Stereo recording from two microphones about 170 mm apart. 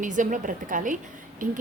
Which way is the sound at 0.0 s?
50° right (ahead or behind).